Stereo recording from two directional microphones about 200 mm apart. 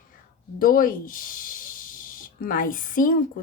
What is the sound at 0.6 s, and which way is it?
Speech, 45° left (ahead or behind).